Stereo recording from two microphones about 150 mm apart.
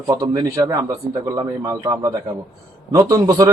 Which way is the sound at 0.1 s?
20° right (ahead or behind).